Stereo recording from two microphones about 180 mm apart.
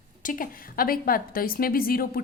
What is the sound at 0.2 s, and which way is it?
A woman's voice, 50° left (ahead or behind).